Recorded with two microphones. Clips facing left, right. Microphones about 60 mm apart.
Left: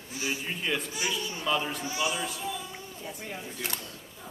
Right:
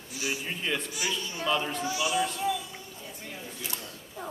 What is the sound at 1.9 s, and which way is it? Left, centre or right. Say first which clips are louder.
Speech: right 1 dB; left.